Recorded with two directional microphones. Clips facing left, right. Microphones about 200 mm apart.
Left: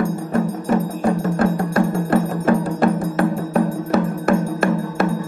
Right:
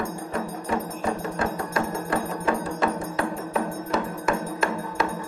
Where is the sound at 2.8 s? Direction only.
55° left (ahead or behind).